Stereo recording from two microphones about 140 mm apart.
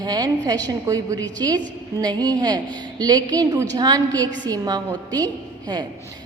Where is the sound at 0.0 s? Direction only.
30° right (ahead or behind).